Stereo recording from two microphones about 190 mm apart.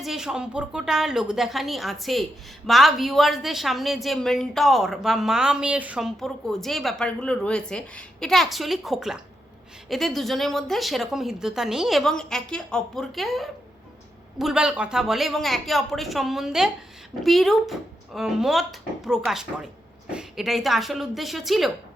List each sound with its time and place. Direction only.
0.0 s a woman's voice: centre (ahead or behind)